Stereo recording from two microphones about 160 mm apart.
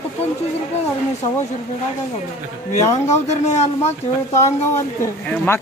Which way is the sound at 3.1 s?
45° left (ahead or behind).